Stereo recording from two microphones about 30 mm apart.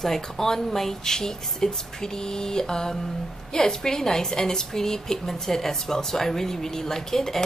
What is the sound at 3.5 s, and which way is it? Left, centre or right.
Speech, centre.